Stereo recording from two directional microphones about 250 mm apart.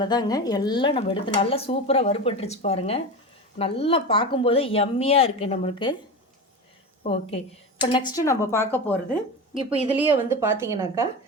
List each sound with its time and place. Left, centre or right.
0.0 s speech: centre
7.1 s a woman's voice: left
9.6 s speech: right
10.2 s a woman's voice: centre